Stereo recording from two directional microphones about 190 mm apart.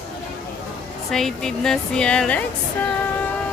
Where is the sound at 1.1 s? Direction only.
5° left (ahead or behind).